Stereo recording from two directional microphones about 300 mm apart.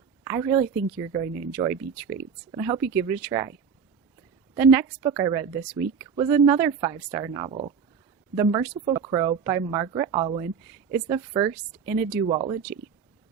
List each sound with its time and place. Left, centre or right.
0.3 s a woman's voice: centre
4.5 s a woman's voice: centre
12.2 s a woman's voice: centre